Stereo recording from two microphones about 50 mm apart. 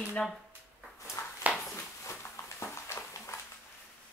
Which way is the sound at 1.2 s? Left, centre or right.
Left.